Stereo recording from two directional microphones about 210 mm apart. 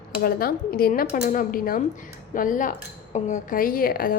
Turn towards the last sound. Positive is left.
turn(degrees=45)  # may be behind; listen again after turning